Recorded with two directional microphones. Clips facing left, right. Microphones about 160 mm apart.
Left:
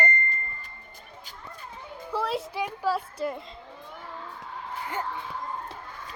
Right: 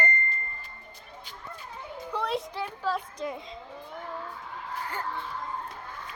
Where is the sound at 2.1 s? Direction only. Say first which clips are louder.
Left 2 dB; 5° left (ahead or behind).